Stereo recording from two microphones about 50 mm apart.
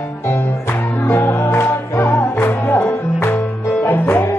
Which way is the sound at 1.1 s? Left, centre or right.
Left.